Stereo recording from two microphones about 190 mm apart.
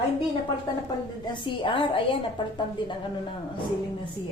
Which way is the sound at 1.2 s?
25° left (ahead or behind).